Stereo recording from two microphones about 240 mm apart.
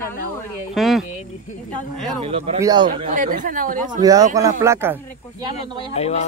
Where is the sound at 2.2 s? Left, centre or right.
Right.